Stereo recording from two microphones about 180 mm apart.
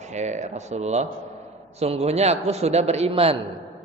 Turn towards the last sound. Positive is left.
turn(degrees=-35)  # may be behind; listen again after turning